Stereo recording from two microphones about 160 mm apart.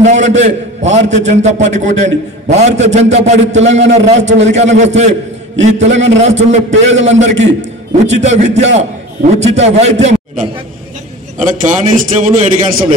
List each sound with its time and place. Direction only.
0.0 s a man's voice: 45° right (ahead or behind)
11.3 s a man's voice: 55° right (ahead or behind)